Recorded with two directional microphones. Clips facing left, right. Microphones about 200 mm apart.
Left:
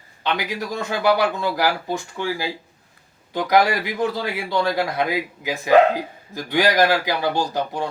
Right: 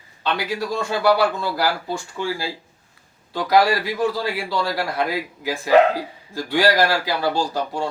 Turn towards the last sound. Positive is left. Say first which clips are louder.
# even
turn(degrees=20)  # may be behind; listen again after turning